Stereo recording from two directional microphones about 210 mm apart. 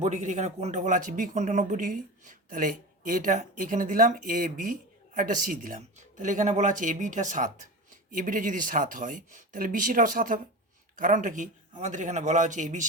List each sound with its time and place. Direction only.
0.0 s speech: 35° right (ahead or behind)